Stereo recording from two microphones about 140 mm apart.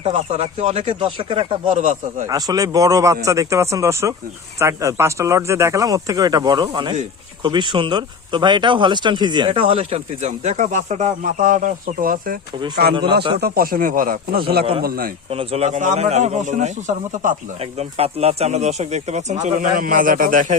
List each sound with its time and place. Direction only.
0.0 s speech: 45° right (ahead or behind)
1.7 s speech: 60° right (ahead or behind)
2.2 s speech: 25° right (ahead or behind); by 12.4 s 90° right
12.6 s speech: 35° right (ahead or behind)
13.4 s speech: 90° right
15.3 s speech: 45° right (ahead or behind); by 17.3 s 65° right (ahead or behind)
17.6 s speech: 45° right (ahead or behind); by 20.6 s 75° right (ahead or behind)